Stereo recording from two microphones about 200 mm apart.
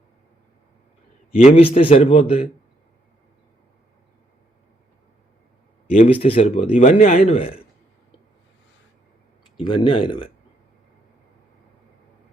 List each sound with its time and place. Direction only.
1.4 s speech: 30° left (ahead or behind)
6.1 s speech: 30° left (ahead or behind)
7.3 s speech: 30° left (ahead or behind)
9.6 s speech: 25° left (ahead or behind)